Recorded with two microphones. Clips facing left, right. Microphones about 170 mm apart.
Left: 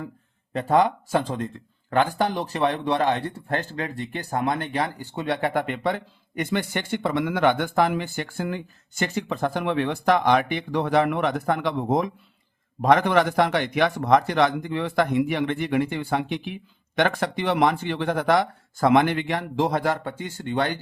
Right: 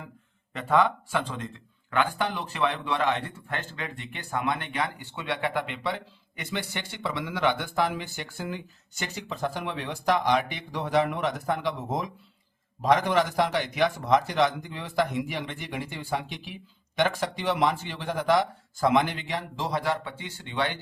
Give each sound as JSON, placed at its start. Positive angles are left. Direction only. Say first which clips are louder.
{"t": 0.5, "sound": "a man's voice", "louder": "left 4 dB", "side_deg": 35}